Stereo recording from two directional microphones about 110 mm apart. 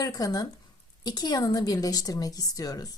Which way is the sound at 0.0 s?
30° left (ahead or behind).